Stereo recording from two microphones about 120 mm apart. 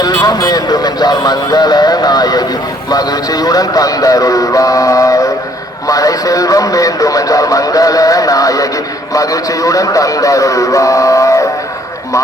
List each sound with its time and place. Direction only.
0.0 s speech: 30° left (ahead or behind)